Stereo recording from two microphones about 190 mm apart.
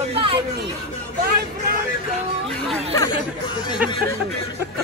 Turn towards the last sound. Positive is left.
turn(degrees=20)  # may be behind; listen again after turning